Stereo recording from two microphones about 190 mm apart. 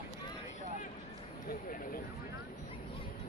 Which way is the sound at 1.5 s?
50° left (ahead or behind).